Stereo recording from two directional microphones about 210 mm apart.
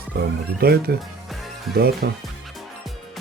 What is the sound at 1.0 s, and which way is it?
Music, centre (ahead or behind).